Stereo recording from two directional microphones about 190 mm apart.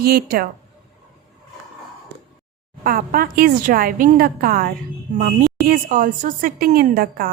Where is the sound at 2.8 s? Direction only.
50° right (ahead or behind).